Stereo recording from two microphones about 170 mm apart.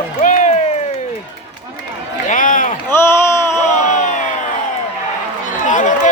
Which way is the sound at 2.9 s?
15° left (ahead or behind).